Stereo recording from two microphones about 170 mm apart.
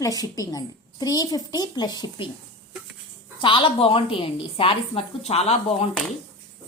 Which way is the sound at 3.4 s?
30° left (ahead or behind).